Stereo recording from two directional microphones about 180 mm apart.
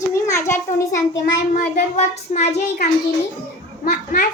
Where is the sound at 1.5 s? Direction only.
40° left (ahead or behind).